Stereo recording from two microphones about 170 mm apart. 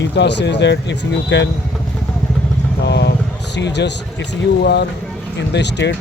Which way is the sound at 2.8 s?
90° left.